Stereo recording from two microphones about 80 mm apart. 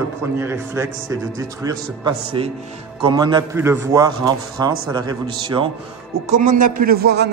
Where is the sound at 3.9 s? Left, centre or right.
Right.